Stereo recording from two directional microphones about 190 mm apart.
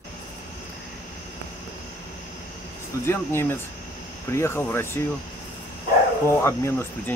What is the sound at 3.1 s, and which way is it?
Speech, 10° left (ahead or behind).